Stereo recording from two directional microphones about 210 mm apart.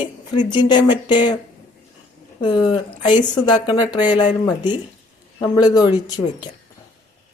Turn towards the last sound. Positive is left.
turn(degrees=20)  # may be behind; listen again after turning